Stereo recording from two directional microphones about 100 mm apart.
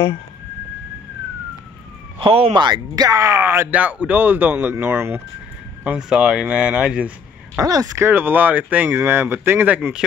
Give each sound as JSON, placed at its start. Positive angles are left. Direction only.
{"t": 2.1, "sound": "speech", "side_deg": -70}
{"t": 2.5, "sound": "speech", "side_deg": -45}
{"t": 3.3, "sound": "a man's voice", "side_deg": -20}
{"t": 5.9, "sound": "speech", "side_deg": -10}
{"t": 7.5, "sound": "speech", "side_deg": -40}
{"t": 8.0, "sound": "a man's voice", "side_deg": -20}